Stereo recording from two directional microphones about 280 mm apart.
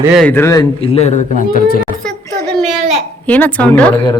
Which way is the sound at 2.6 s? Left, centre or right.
Centre.